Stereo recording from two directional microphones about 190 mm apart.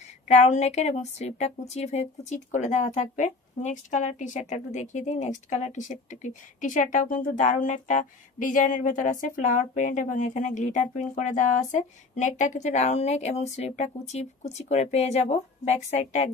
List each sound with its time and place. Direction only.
0.3 s speech: 35° left (ahead or behind)